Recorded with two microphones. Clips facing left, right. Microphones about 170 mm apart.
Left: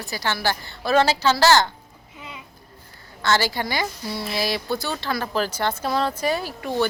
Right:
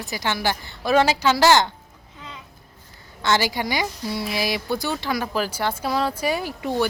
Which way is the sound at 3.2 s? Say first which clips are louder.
Even; 15° right (ahead or behind).